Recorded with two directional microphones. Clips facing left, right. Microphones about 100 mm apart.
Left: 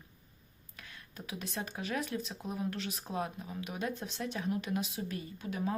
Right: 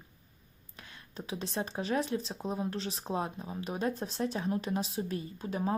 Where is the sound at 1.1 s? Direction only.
30° right (ahead or behind).